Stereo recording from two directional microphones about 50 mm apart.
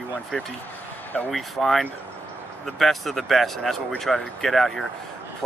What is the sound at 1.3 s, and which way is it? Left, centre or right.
Speech, centre.